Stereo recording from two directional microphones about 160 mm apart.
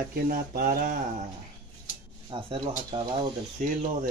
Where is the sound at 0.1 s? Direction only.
65° right (ahead or behind).